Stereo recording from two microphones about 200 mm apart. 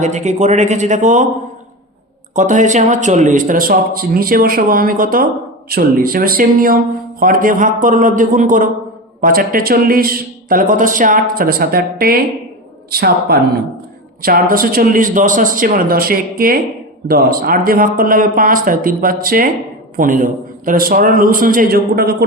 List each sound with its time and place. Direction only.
0.0 s a man's voice: 35° right (ahead or behind)
2.3 s a man's voice: 40° right (ahead or behind)